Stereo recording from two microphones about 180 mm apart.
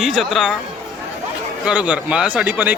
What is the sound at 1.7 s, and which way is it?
Speech, 5° right (ahead or behind).